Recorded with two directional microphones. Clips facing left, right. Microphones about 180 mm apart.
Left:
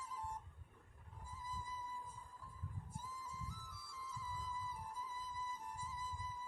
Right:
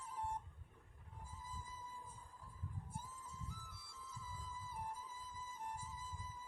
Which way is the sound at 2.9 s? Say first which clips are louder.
Left 2 dB; 55° right (ahead or behind).